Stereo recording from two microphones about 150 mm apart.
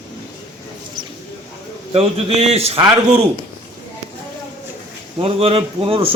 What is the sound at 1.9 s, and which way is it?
Speech, 40° right (ahead or behind).